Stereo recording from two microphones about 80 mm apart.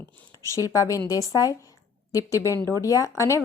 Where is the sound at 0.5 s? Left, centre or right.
Left.